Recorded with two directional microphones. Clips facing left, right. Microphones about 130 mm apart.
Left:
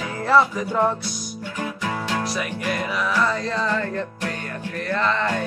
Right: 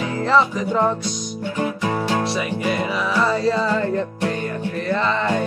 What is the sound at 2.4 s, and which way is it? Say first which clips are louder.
Music: right 4 dB; 5° right (ahead or behind).